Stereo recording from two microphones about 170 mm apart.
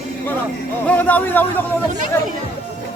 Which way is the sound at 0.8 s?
10° left (ahead or behind).